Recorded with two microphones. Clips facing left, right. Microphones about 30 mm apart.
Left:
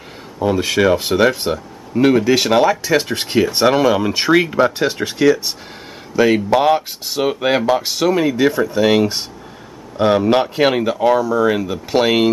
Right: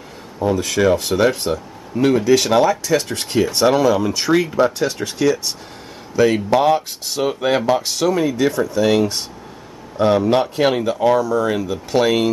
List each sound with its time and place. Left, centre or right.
0.4 s speech: left